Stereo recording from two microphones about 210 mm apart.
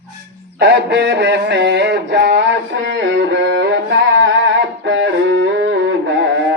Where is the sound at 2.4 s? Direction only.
60° right (ahead or behind).